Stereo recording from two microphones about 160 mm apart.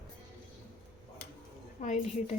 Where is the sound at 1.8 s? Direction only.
50° left (ahead or behind).